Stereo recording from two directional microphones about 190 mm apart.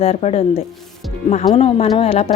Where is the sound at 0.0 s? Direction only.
35° left (ahead or behind).